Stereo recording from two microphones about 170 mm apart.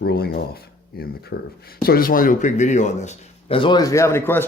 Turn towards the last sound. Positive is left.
turn(degrees=10)  # may be behind; listen again after turning